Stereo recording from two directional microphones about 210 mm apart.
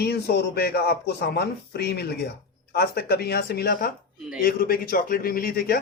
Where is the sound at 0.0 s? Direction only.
50° left (ahead or behind).